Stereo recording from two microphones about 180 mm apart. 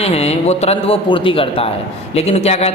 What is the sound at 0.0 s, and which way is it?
A man's voice, 35° left (ahead or behind).